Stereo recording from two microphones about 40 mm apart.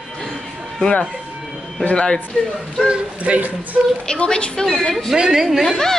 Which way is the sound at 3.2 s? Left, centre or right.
Right.